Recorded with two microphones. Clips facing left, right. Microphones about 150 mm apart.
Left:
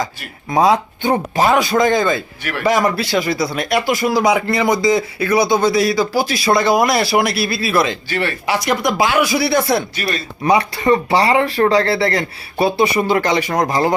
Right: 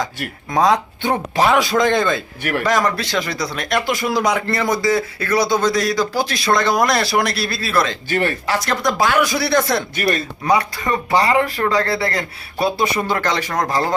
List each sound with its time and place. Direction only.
0.5 s a man's voice: 5° left (ahead or behind)
8.1 s speech: 45° right (ahead or behind)
8.4 s speech: 10° left (ahead or behind)
9.9 s speech: 50° right (ahead or behind)
10.5 s speech: 30° left (ahead or behind)
12.8 s speech: 10° left (ahead or behind)